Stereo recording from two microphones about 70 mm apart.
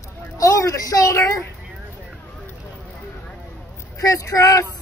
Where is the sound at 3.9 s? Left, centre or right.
Left.